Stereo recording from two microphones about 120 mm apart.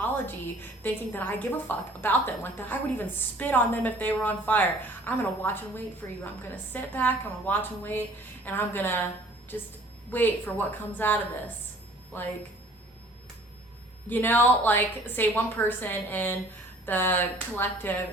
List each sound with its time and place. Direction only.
0.8 s a woman's voice: 15° left (ahead or behind)
14.1 s a woman's voice: 15° left (ahead or behind)